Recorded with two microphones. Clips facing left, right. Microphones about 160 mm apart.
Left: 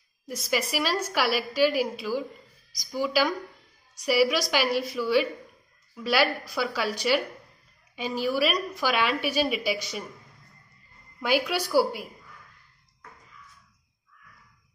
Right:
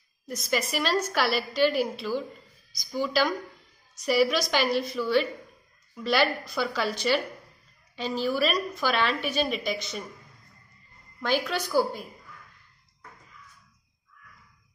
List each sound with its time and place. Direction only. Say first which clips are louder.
0.3 s a woman's voice: even; 10° left (ahead or behind)
11.1 s a woman's voice: left 2 dB; 10° left (ahead or behind)